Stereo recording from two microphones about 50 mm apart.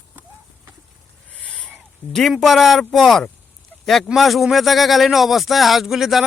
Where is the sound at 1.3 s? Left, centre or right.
Left.